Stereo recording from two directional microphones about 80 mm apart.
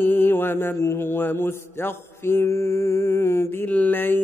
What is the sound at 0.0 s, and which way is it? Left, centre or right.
Mantra, left.